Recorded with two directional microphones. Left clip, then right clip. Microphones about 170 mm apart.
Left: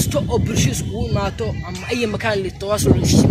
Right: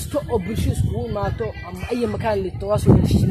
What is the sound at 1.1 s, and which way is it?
A woman's voice, 10° left (ahead or behind).